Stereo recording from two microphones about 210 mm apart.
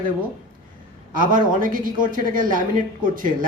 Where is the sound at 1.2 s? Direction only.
40° right (ahead or behind).